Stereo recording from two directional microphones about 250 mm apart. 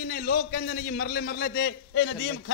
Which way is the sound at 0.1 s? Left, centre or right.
Left.